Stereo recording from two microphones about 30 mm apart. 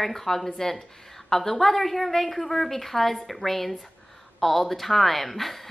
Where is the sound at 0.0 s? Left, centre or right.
Centre.